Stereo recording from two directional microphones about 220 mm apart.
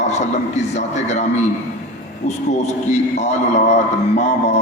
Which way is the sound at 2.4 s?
30° left (ahead or behind).